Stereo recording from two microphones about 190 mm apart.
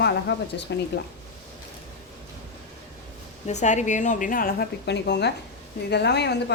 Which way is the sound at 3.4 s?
40° left (ahead or behind).